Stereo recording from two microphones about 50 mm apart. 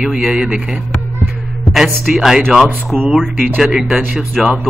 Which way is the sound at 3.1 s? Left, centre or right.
Centre.